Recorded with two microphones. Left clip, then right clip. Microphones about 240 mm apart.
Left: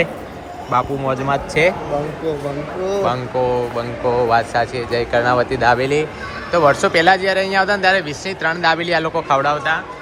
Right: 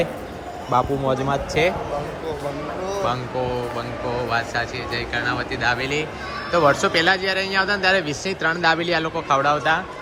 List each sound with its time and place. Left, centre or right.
0.7 s speech: centre
1.3 s a man's voice: centre
3.0 s speech: centre
6.5 s a man's voice: centre